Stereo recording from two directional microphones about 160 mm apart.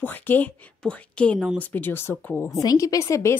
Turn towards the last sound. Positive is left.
turn(degrees=20)  # may be behind; listen again after turning